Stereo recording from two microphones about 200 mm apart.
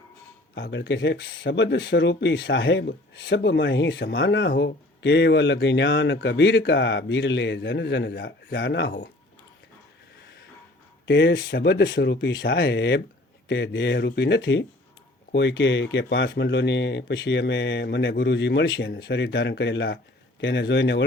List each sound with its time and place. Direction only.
0.5 s speech: 65° left (ahead or behind)
11.0 s speech: 60° left (ahead or behind)